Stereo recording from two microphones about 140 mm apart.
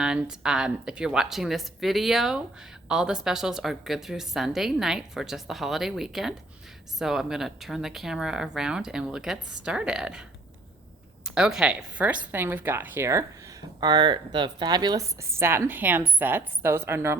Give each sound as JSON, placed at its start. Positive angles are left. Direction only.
{"t": 0.0, "sound": "a woman's voice", "side_deg": -5}